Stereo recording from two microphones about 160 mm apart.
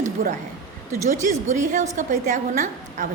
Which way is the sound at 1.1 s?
50° right (ahead or behind).